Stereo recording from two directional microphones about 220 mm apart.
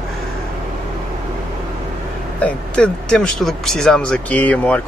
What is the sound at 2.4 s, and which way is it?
Speech, 5° left (ahead or behind).